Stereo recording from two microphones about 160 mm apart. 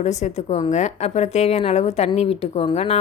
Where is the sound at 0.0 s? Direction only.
45° left (ahead or behind).